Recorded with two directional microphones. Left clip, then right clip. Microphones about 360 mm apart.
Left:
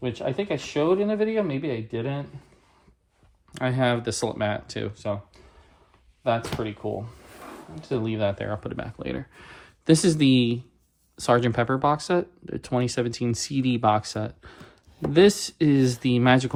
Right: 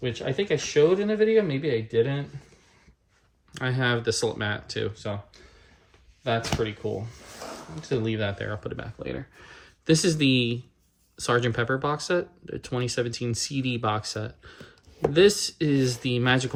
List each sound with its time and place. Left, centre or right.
0.0 s speech: centre
3.5 s speech: centre
7.8 s speech: centre